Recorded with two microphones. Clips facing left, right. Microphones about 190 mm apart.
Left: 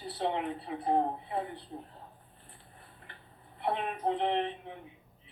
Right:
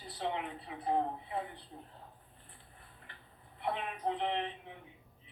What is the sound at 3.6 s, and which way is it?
Speech, 45° left (ahead or behind).